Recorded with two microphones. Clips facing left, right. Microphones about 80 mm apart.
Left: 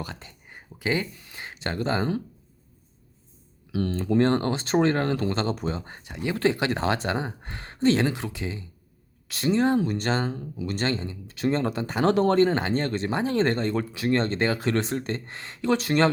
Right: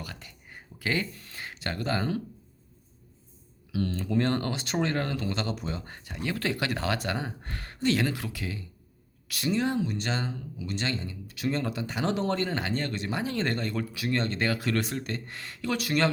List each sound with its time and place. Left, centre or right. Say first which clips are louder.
0.0 s a sound: left 5 dB; left
1.1 s speech: left 1 dB; centre
3.7 s speech: left 4 dB; left
5.8 s speech: left 3 dB; left